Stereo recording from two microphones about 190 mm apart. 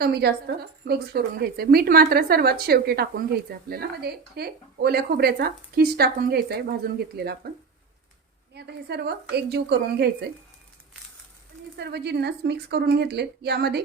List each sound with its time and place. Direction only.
0.0 s a woman's voice: 60° right (ahead or behind)
8.5 s a woman's voice: 60° right (ahead or behind)
11.8 s a woman's voice: 60° right (ahead or behind)